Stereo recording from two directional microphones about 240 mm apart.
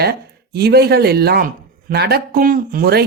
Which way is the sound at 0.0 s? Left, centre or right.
Right.